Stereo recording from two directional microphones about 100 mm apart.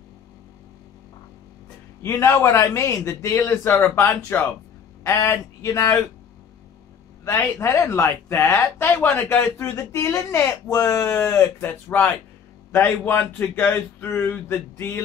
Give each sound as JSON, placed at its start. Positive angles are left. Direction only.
{"t": 2.0, "sound": "speech", "side_deg": 25}
{"t": 7.2, "sound": "speech", "side_deg": 30}